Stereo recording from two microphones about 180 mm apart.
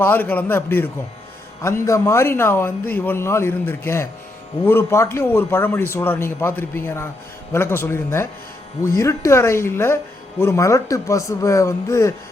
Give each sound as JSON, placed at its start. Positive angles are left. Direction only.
{"t": 0.0, "sound": "speech", "side_deg": 10}